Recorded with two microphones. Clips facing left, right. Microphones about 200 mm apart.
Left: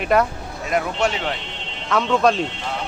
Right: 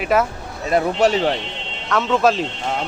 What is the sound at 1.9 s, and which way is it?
Speech, 5° right (ahead or behind).